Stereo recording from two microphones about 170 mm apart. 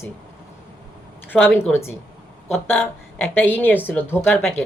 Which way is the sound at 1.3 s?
10° left (ahead or behind).